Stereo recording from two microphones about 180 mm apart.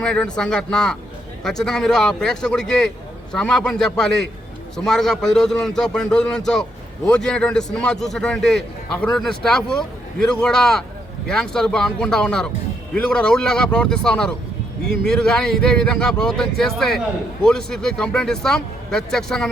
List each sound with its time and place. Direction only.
0.0 s a man's voice: 5° left (ahead or behind)